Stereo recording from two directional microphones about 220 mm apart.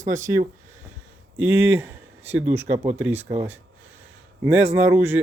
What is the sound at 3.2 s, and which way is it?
Speech, 25° right (ahead or behind).